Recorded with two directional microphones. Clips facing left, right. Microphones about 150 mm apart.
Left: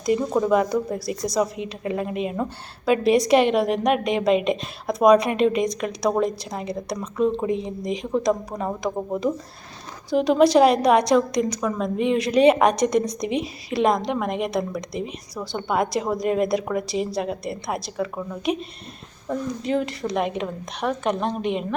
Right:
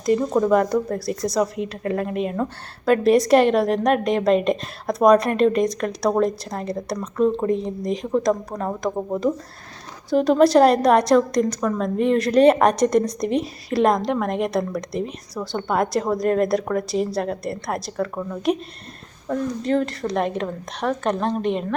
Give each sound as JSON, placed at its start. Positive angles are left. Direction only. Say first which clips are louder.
{"t": 0.0, "sound": "a woman's voice", "louder": "right 2 dB", "side_deg": 5}